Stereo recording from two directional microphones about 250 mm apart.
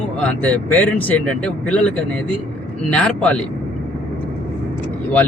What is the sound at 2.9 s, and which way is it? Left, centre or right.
Speech, centre.